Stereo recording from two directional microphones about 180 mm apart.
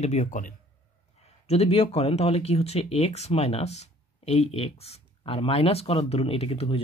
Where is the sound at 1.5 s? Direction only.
35° left (ahead or behind).